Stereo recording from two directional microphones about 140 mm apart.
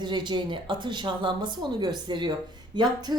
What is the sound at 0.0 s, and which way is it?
A woman's voice, 30° right (ahead or behind).